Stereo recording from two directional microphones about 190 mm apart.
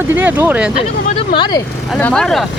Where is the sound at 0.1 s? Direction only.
10° right (ahead or behind).